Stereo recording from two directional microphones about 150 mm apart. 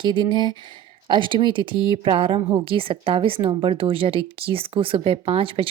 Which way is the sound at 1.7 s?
25° left (ahead or behind).